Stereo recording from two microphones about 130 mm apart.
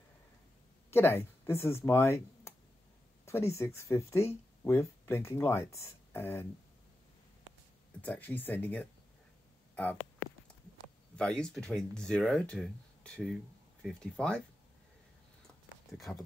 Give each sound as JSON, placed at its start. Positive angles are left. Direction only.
{"t": 0.8, "sound": "speech", "side_deg": 20}
{"t": 8.0, "sound": "speech", "side_deg": 15}
{"t": 11.1, "sound": "speech", "side_deg": 5}
{"t": 15.9, "sound": "speech", "side_deg": 0}